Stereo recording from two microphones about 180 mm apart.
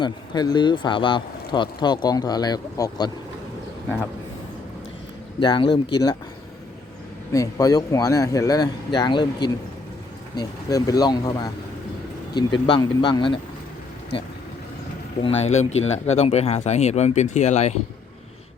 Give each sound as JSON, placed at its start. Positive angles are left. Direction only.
{"t": 0.0, "sound": "speech", "side_deg": 25}
{"t": 5.4, "sound": "speech", "side_deg": 25}
{"t": 7.3, "sound": "speech", "side_deg": 20}
{"t": 15.2, "sound": "speech", "side_deg": 35}